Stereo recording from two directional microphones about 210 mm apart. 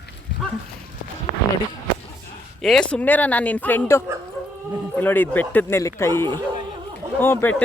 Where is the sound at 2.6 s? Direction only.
5° left (ahead or behind).